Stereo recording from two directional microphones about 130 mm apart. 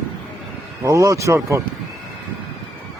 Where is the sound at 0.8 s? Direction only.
25° right (ahead or behind).